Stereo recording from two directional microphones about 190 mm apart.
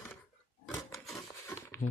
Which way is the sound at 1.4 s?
15° left (ahead or behind).